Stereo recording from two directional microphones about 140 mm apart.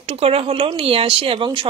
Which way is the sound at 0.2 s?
45° right (ahead or behind).